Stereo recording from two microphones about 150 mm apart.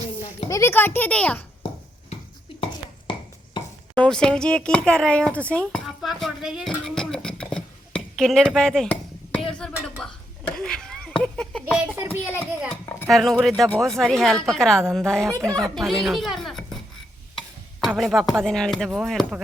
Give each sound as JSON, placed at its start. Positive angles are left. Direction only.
{"t": 0.4, "sound": "a child's voice", "side_deg": 20}
{"t": 3.9, "sound": "speech", "side_deg": 5}
{"t": 5.5, "sound": "dishes", "side_deg": 5}
{"t": 9.5, "sound": "a sound", "side_deg": 5}
{"t": 11.9, "sound": "speech", "side_deg": -15}
{"t": 12.4, "sound": "a sound", "side_deg": 15}
{"t": 13.1, "sound": "speech", "side_deg": 0}
{"t": 15.2, "sound": "speech", "side_deg": -20}
{"t": 15.7, "sound": "speech", "side_deg": 0}